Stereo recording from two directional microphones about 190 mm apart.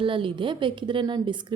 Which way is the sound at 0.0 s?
25° right (ahead or behind).